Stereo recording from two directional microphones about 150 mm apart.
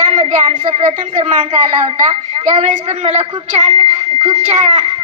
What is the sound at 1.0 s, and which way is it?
Speech, 60° right (ahead or behind).